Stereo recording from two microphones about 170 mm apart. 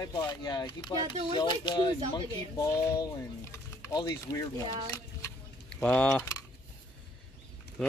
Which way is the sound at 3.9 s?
20° left (ahead or behind).